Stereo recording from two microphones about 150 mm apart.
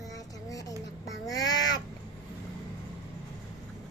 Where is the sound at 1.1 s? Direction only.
25° left (ahead or behind).